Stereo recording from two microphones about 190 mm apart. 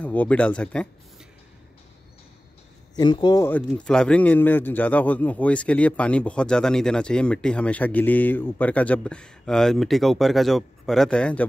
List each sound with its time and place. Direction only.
0.0 s a man's voice: 10° left (ahead or behind)
3.0 s speech: 25° left (ahead or behind)
3.4 s a man's voice: 5° left (ahead or behind)